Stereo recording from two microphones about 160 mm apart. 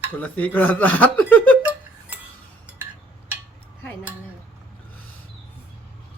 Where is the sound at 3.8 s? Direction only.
15° left (ahead or behind).